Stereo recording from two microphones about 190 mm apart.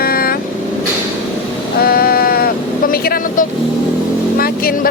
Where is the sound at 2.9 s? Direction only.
50° left (ahead or behind).